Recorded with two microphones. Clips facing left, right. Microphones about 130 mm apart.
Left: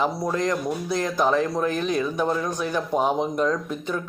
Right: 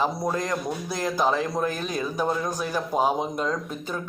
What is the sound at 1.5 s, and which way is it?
Speech, 40° right (ahead or behind).